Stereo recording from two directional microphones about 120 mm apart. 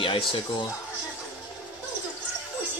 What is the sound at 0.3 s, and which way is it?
Speech, 40° left (ahead or behind).